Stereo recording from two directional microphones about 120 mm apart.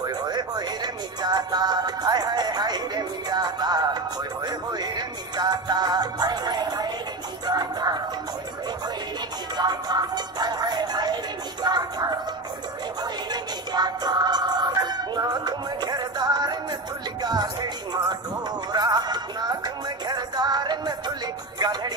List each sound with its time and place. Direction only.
0.0 s a sound: 35° right (ahead or behind)
1.2 s speech: 35° right (ahead or behind)
7.4 s music: 35° right (ahead or behind)
9.6 s music: 35° right (ahead or behind)
18.7 s music: 35° right (ahead or behind)